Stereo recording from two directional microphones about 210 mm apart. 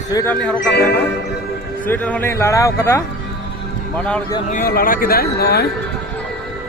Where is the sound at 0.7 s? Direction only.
50° left (ahead or behind).